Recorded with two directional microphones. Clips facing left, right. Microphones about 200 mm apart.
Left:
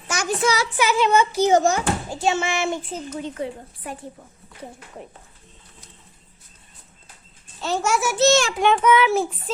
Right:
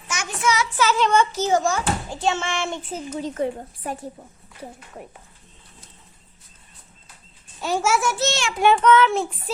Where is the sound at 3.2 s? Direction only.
40° right (ahead or behind).